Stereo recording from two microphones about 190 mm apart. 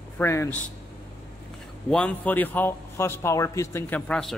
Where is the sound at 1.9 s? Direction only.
5° left (ahead or behind).